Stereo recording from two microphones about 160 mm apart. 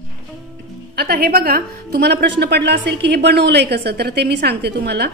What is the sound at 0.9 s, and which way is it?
A woman's voice, 75° right (ahead or behind).